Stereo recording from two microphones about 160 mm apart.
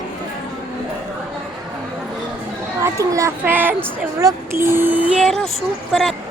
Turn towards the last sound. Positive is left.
turn(degrees=0)  # may be behind; listen again after turning